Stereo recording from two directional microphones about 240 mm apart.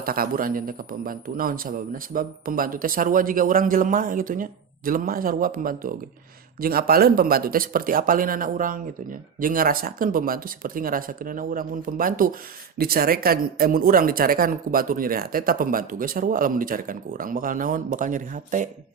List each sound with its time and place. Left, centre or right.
0.0 s speech: right